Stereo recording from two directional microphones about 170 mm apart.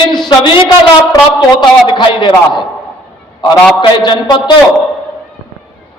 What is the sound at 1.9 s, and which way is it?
A man's voice, 30° left (ahead or behind).